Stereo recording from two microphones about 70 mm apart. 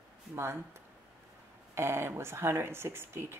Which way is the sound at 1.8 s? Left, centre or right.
Right.